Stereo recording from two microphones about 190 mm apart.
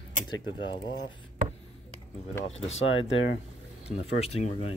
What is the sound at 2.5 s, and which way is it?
Speech, 35° left (ahead or behind).